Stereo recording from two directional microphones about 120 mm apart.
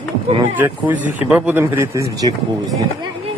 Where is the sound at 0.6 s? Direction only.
15° right (ahead or behind).